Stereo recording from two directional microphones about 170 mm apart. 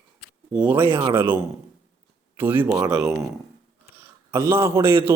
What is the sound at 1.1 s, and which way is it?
A man's voice, 10° right (ahead or behind).